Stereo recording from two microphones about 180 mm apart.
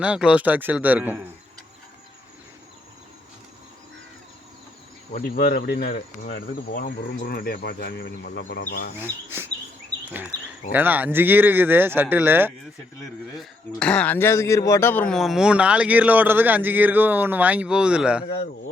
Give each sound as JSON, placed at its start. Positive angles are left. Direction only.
{"t": 0.0, "sound": "speech", "side_deg": -5}
{"t": 5.1, "sound": "cricket", "side_deg": 55}
{"t": 9.0, "sound": "speech", "side_deg": -10}
{"t": 13.3, "sound": "speech", "side_deg": 0}